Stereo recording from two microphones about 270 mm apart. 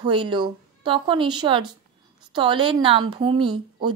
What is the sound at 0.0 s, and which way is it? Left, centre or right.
A woman's voice, centre.